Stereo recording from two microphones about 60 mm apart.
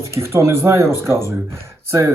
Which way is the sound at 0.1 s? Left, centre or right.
Right.